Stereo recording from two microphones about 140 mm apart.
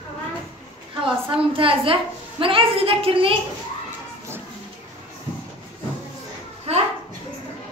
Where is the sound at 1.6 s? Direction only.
40° right (ahead or behind).